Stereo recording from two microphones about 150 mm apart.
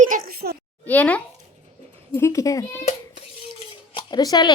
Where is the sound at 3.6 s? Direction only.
30° left (ahead or behind).